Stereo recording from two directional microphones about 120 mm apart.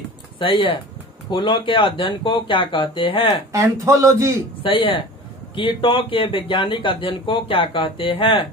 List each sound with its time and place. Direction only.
0.4 s speech: 45° left (ahead or behind)
3.8 s a man's voice: 25° right (ahead or behind)
4.6 s speech: 45° left (ahead or behind)